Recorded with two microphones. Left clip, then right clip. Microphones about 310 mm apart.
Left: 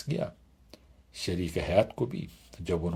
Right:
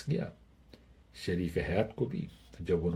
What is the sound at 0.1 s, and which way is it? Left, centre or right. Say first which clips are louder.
Speech: left 4 dB; left.